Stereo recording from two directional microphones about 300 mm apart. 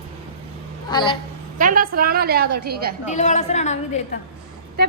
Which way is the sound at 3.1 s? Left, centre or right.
Left.